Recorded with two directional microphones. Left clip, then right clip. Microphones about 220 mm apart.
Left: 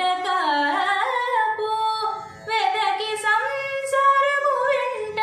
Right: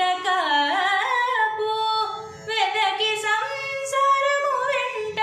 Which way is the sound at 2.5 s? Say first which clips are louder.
Even; 10° left (ahead or behind).